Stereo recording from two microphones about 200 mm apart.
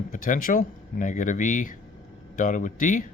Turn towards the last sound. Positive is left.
turn(degrees=40)  # may be behind; listen again after turning